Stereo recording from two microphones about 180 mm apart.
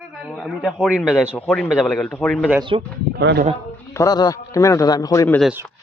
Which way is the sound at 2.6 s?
30° right (ahead or behind).